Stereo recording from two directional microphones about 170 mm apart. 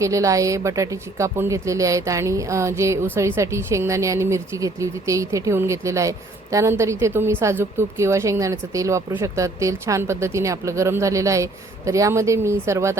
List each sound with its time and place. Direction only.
0.0 s a woman's voice: 20° right (ahead or behind)